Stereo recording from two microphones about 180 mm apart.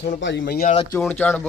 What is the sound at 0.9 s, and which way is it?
Speech, 10° left (ahead or behind).